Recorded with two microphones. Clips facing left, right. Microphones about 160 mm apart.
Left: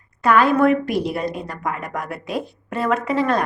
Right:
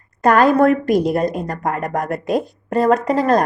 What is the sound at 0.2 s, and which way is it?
A woman's voice, 45° right (ahead or behind).